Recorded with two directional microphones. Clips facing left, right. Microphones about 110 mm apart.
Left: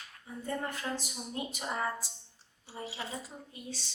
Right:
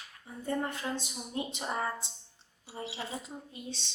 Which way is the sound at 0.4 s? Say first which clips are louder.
Right 3 dB; 20° right (ahead or behind).